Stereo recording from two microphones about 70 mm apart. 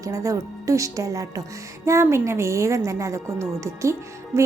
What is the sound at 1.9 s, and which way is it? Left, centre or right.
A woman's voice, right.